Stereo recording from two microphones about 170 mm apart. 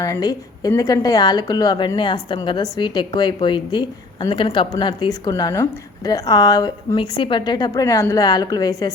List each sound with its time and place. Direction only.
0.0 s a woman's voice: 20° left (ahead or behind)